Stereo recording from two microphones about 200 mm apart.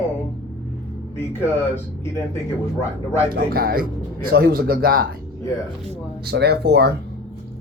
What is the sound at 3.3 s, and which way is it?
Speech, 45° right (ahead or behind).